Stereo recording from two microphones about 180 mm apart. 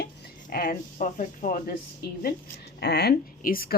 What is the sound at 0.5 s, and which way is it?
A woman's voice, 50° left (ahead or behind).